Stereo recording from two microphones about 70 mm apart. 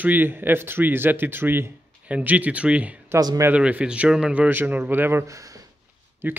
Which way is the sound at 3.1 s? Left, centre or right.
Right.